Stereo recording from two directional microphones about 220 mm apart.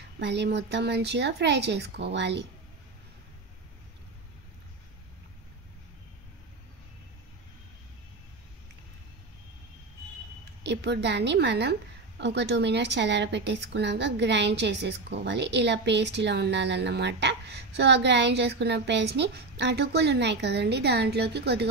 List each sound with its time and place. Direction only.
0.2 s speech: 50° right (ahead or behind)
10.6 s speech: 50° right (ahead or behind)